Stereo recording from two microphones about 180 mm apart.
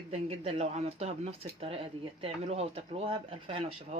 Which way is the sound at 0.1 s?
35° right (ahead or behind).